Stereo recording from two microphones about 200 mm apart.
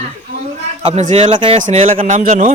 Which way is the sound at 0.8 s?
35° right (ahead or behind).